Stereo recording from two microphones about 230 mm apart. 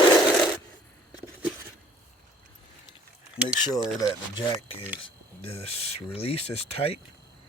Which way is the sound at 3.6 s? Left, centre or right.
Centre.